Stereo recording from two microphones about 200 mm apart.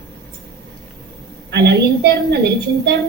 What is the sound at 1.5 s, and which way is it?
Speech, 55° right (ahead or behind).